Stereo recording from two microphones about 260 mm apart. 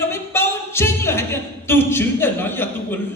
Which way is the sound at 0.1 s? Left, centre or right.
Centre.